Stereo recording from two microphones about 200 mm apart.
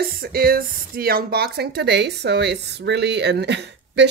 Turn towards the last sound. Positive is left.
turn(degrees=-60)  # may be behind; listen again after turning